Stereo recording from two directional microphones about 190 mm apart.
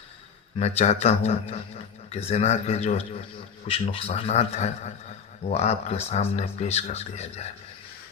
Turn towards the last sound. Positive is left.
turn(degrees=35)  # may be behind; listen again after turning